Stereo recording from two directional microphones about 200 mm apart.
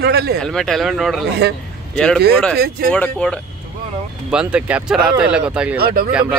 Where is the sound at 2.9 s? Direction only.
5° left (ahead or behind).